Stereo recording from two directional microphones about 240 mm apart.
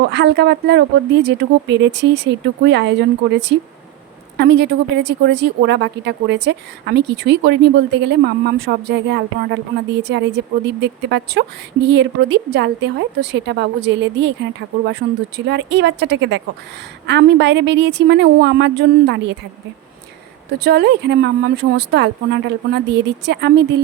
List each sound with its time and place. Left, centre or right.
0.0 s speech: right
15.4 s speech: right
20.6 s speech: right